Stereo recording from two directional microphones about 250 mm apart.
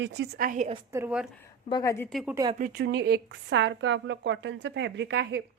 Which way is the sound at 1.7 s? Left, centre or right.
Centre.